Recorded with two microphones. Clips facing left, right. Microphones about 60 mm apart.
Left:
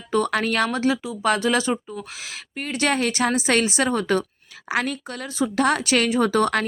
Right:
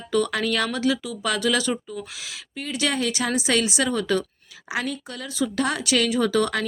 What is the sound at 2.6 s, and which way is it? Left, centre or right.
Speech, left.